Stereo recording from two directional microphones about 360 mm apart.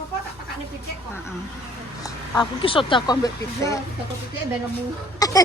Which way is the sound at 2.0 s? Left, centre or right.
Centre.